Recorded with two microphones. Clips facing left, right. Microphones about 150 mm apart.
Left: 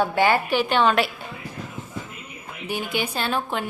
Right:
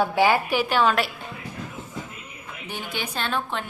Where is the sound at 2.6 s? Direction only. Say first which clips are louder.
Left 6 dB; 10° left (ahead or behind).